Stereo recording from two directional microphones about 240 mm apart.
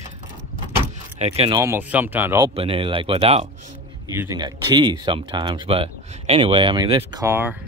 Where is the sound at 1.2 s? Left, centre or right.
Right.